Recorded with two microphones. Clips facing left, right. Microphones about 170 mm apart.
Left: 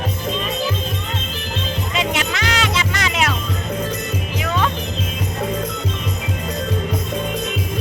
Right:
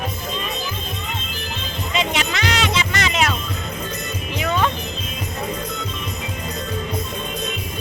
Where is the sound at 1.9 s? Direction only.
5° left (ahead or behind).